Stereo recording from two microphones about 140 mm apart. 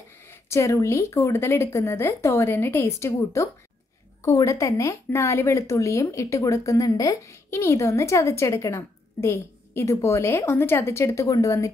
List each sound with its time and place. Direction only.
0.3 s speech: 20° left (ahead or behind)